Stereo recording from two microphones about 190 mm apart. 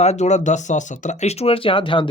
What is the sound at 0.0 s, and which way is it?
Speech, 35° left (ahead or behind).